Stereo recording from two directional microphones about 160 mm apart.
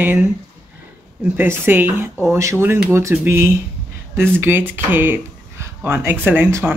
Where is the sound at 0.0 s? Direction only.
15° right (ahead or behind).